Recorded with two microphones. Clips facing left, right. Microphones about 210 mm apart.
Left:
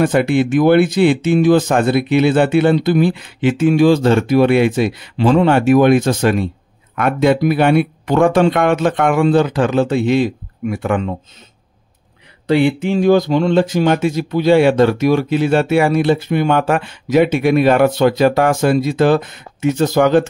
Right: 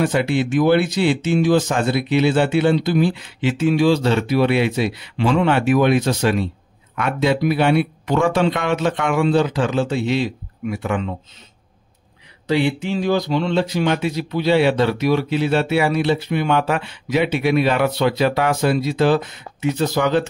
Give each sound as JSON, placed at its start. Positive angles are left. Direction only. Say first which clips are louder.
{"t": 0.0, "sound": "speech", "louder": "left 5 dB", "side_deg": 55}
{"t": 12.4, "sound": "speech", "louder": "left 5 dB", "side_deg": 55}